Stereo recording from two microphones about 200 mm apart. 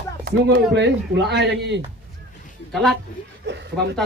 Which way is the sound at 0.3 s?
55° right (ahead or behind).